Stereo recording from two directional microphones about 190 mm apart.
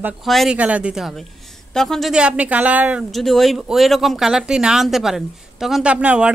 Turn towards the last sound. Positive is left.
turn(degrees=-5)  # may be behind; listen again after turning